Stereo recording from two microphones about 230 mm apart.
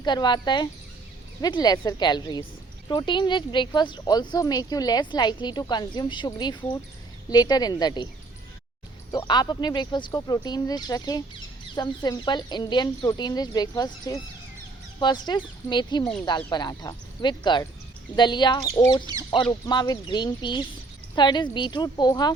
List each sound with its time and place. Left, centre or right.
0.0 s speech: centre
9.1 s speech: centre